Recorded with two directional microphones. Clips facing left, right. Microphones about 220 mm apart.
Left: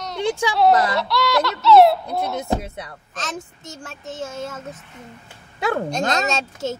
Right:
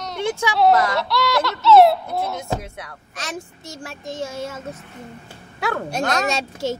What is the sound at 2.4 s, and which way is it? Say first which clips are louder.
Music: left 3 dB; 20° left (ahead or behind).